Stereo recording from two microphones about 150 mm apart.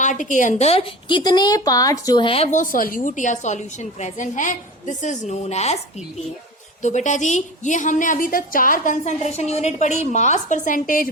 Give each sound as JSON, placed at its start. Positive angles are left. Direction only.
{"t": 0.0, "sound": "a woman's voice", "side_deg": 55}
{"t": 2.5, "sound": "a woman's voice", "side_deg": 60}
{"t": 6.8, "sound": "a woman's voice", "side_deg": 50}